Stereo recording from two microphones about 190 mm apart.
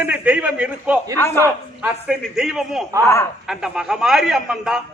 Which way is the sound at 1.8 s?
Centre (ahead or behind).